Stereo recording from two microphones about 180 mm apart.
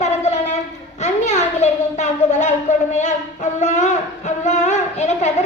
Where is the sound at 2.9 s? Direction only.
40° left (ahead or behind).